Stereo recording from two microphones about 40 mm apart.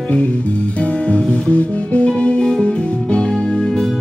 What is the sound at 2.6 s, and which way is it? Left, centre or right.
Music, left.